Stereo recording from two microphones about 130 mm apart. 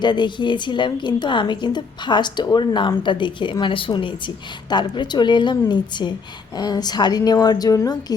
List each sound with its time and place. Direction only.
0.0 s a woman's voice: 35° left (ahead or behind)